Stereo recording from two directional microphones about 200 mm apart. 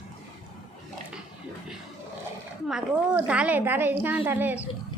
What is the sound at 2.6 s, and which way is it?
A woman's voice, 5° right (ahead or behind).